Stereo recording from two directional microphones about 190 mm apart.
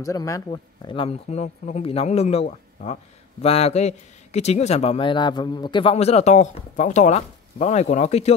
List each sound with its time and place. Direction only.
0.0 s a man's voice: 15° left (ahead or behind); by 8.4 s 35° left (ahead or behind)